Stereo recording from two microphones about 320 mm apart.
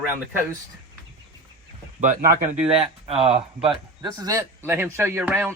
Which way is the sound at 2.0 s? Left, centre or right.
Right.